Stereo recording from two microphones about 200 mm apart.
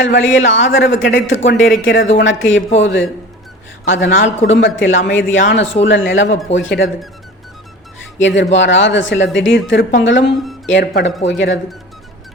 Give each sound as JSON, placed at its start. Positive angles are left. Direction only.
{"t": 0.0, "sound": "speech", "side_deg": 70}
{"t": 8.2, "sound": "speech", "side_deg": 70}